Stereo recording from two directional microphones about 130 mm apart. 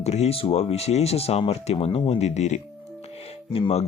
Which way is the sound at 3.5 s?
50° left (ahead or behind).